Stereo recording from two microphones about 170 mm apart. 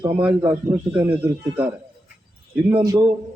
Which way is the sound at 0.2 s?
10° right (ahead or behind).